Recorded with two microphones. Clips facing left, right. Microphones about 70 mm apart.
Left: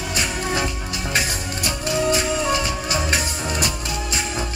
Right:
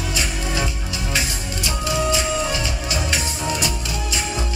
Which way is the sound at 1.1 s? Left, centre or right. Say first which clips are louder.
Left 2 dB; left.